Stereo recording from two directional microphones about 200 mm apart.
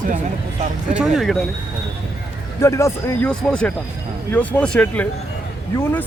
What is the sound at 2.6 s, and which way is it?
Speech, 15° left (ahead or behind).